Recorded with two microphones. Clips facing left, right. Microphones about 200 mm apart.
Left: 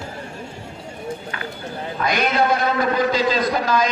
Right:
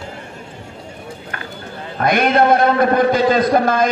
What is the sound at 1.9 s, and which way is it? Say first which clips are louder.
A man's voice: right 6 dB; 55° right (ahead or behind).